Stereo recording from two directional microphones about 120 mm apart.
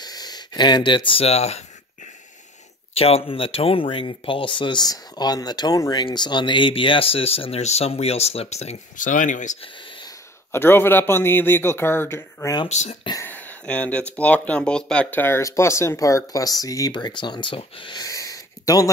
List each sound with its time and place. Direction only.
0.0 s speech: 35° left (ahead or behind); by 1.6 s 60° left (ahead or behind)
2.9 s speech: 55° left (ahead or behind); by 9.6 s 90° left
10.5 s speech: 20° left (ahead or behind)
12.6 s speech: 70° left (ahead or behind)
13.2 s speech: 15° left (ahead or behind); by 18.0 s 45° left (ahead or behind)
18.0 s a sound: 30° left (ahead or behind)